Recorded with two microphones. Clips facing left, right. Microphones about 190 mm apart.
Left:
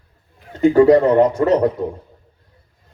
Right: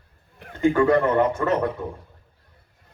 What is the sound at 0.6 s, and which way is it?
A man's voice, 35° left (ahead or behind).